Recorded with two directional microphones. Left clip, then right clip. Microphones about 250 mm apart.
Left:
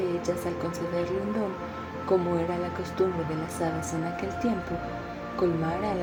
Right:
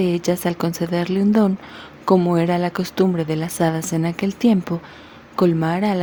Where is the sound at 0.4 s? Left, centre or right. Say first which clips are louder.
Right 8 dB; right.